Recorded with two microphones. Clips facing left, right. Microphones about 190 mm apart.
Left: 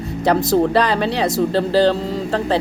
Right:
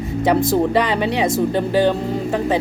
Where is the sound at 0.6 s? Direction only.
15° right (ahead or behind).